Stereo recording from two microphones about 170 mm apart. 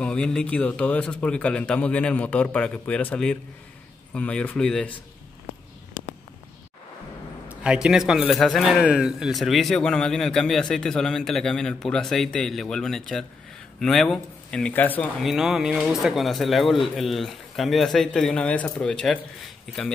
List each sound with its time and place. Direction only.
0.0 s a man's voice: 5° left (ahead or behind)
7.6 s a man's voice: 5° right (ahead or behind)